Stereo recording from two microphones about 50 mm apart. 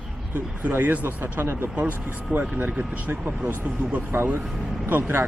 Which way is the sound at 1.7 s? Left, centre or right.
Right.